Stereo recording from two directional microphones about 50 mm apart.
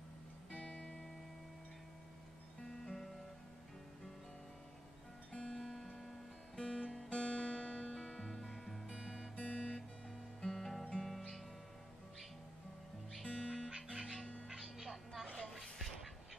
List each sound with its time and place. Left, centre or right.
0.5 s music: left
2.6 s music: centre
5.3 s guitar: centre
8.8 s music: centre
9.3 s guitar: left
10.4 s guitar: centre
11.0 s music: centre
13.2 s music: centre
13.7 s music: centre